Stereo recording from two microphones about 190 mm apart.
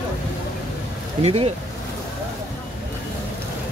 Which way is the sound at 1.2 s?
35° right (ahead or behind).